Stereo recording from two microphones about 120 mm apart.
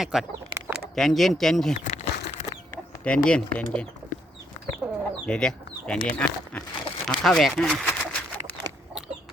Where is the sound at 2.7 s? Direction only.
10° left (ahead or behind).